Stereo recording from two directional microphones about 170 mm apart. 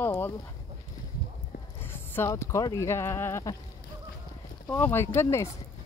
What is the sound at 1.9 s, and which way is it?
Speech, 15° left (ahead or behind).